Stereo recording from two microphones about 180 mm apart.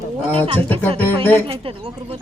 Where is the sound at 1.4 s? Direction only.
30° right (ahead or behind).